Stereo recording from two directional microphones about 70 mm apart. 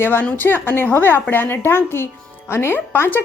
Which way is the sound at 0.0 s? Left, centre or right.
Left.